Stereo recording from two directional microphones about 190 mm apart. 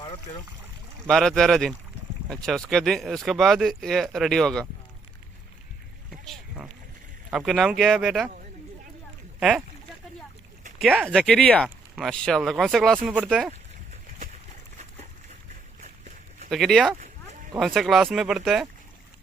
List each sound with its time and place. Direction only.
1.0 s speech: centre (ahead or behind)
6.1 s boat: centre (ahead or behind)
7.3 s speech: centre (ahead or behind)
9.4 s speech: 5° right (ahead or behind)
10.8 s speech: 5° right (ahead or behind)
15.8 s a sound: 40° right (ahead or behind)
16.5 s speech: centre (ahead or behind)